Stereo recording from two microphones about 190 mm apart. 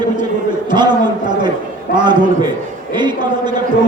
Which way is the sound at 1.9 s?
25° right (ahead or behind).